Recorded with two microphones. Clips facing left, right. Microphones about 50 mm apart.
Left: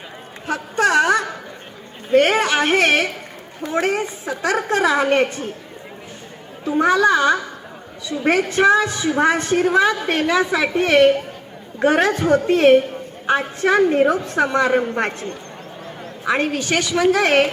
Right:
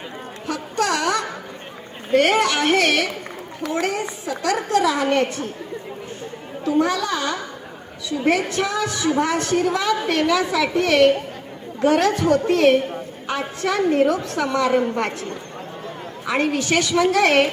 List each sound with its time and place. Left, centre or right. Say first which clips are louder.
0.4 s a sound: left 4 dB; left
2.1 s a woman's voice: left 2 dB; left
6.7 s a woman's voice: left 6 dB; left
16.6 s a woman's voice: left 3 dB; centre